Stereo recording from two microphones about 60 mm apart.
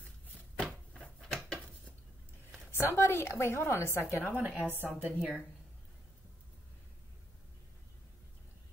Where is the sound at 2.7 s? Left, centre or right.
Left.